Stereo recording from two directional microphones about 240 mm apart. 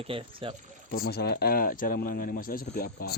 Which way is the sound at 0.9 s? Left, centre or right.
Left.